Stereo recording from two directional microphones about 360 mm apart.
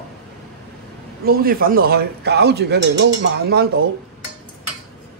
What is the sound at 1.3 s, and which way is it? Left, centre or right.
Speech, right.